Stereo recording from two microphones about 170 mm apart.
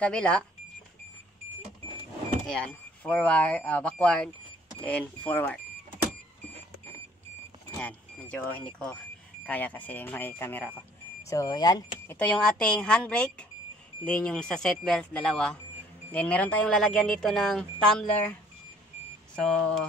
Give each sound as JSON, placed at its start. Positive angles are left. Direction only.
{"t": 0.0, "sound": "speech", "side_deg": 5}
{"t": 2.4, "sound": "speech", "side_deg": 5}
{"t": 7.8, "sound": "speech", "side_deg": 10}
{"t": 12.2, "sound": "speech", "side_deg": 5}